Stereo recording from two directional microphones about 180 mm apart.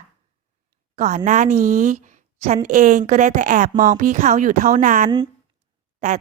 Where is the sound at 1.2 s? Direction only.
45° right (ahead or behind).